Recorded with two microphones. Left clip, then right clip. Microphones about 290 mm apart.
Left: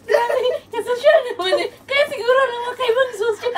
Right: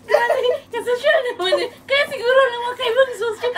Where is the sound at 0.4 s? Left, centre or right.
Centre.